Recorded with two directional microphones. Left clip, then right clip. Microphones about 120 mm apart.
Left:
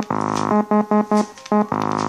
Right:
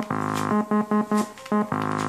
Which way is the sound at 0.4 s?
30° left (ahead or behind).